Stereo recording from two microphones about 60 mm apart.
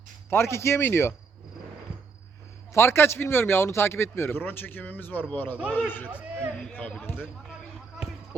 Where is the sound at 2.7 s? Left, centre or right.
Left.